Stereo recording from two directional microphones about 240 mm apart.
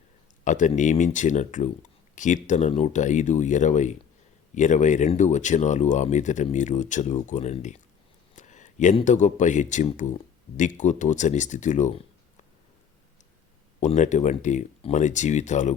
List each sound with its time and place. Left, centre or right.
0.4 s speech: left
13.7 s speech: left